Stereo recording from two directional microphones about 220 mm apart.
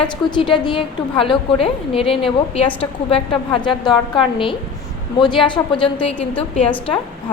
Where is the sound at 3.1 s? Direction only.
25° left (ahead or behind).